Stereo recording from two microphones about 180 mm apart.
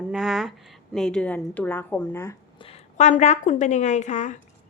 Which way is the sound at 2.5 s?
35° left (ahead or behind).